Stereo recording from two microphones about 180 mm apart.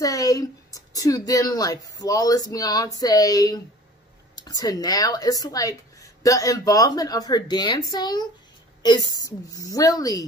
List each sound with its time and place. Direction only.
0.0 s speech: 20° left (ahead or behind)